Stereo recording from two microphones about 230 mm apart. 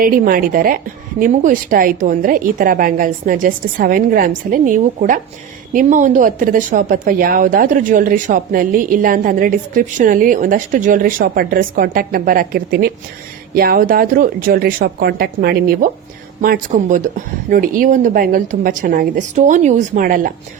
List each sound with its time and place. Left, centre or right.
0.0 s speech: right